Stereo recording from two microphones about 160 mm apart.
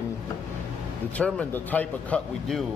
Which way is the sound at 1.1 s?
10° left (ahead or behind).